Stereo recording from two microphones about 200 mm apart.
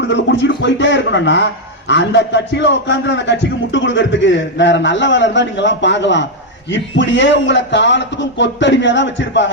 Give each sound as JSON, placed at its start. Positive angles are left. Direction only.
{"t": 0.1, "sound": "a man's voice", "side_deg": 65}